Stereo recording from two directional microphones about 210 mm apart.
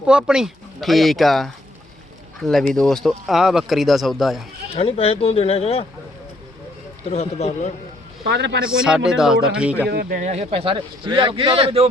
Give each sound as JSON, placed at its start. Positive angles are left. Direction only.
{"t": 0.1, "sound": "speech", "side_deg": -5}
{"t": 4.7, "sound": "speech", "side_deg": 30}
{"t": 7.1, "sound": "speech", "side_deg": 30}
{"t": 8.2, "sound": "a man's voice", "side_deg": -55}
{"t": 8.6, "sound": "speech", "side_deg": -5}
{"t": 9.9, "sound": "speech", "side_deg": -45}